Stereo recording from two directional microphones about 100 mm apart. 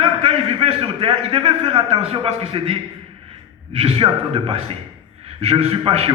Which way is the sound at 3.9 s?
80° right.